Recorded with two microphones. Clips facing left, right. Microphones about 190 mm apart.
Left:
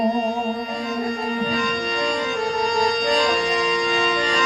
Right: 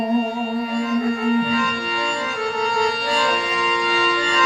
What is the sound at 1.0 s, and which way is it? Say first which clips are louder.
Music: right 5 dB; 40° left (ahead or behind).